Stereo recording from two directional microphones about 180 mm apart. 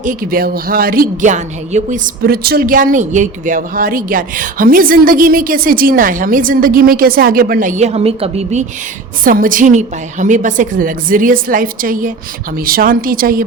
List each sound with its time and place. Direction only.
0.0 s speech: 50° right (ahead or behind)
2.2 s speech: 55° right (ahead or behind); by 8.6 s 35° right (ahead or behind)
9.2 s speech: 50° right (ahead or behind)